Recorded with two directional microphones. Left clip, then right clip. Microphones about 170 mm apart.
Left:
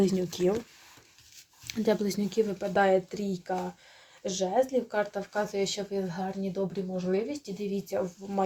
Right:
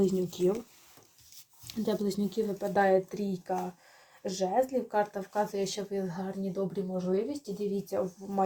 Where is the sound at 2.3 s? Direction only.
15° left (ahead or behind).